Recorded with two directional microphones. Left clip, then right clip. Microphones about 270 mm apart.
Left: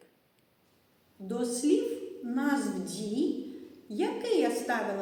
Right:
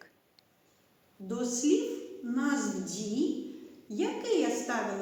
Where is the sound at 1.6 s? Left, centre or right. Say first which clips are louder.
Left 1 dB; centre.